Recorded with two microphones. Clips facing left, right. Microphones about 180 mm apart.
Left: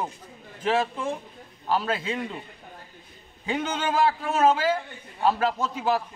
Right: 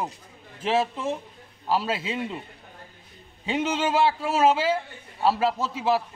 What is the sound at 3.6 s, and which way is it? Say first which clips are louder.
A man's voice: right 2 dB; 5° right (ahead or behind).